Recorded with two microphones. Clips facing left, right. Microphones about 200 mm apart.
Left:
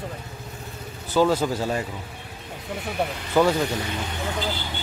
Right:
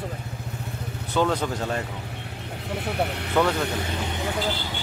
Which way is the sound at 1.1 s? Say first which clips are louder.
Left 3 dB; 5° left (ahead or behind).